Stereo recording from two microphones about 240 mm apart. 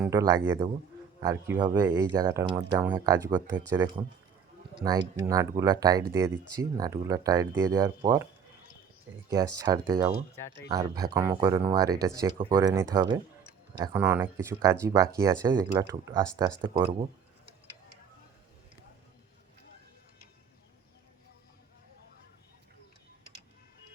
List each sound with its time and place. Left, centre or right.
0.0 s speech: centre
9.6 s speech: centre